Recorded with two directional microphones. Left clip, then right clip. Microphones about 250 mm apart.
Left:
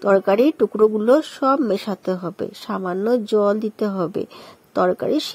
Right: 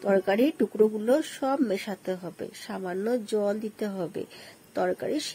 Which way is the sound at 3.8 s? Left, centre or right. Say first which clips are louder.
Left 9 dB; left.